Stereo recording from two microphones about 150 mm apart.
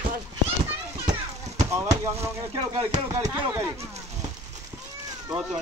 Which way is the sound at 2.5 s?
30° right (ahead or behind).